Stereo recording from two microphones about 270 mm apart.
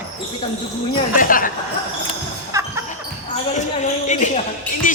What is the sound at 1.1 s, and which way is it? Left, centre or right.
Speech, left.